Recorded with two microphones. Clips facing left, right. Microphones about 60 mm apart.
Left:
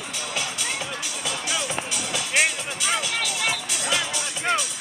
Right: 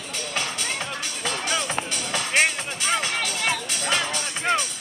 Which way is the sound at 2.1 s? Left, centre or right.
Right.